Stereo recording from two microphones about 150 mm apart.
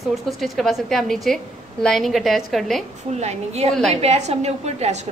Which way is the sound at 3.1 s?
45° right (ahead or behind).